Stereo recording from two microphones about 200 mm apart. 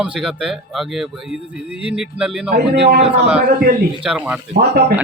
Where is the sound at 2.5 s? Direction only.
55° right (ahead or behind).